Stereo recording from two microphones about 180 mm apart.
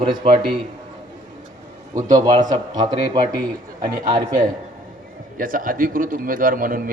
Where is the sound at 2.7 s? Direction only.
25° right (ahead or behind).